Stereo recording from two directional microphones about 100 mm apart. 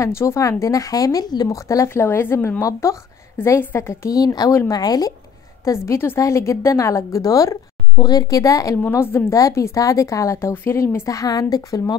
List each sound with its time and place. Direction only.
0.0 s a woman's voice: 30° left (ahead or behind)
5.7 s a woman's voice: 25° left (ahead or behind)